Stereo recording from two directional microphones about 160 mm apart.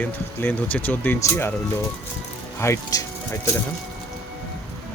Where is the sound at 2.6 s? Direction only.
15° left (ahead or behind).